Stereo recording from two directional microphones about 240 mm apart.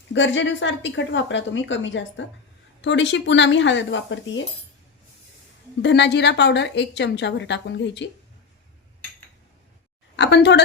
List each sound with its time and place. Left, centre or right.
0.1 s a woman's voice: left
5.8 s a woman's voice: left
10.2 s a woman's voice: left